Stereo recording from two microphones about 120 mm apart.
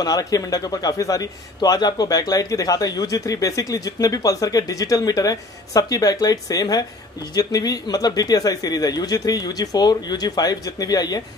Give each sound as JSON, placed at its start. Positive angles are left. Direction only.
{"t": 0.0, "sound": "a man's voice", "side_deg": 30}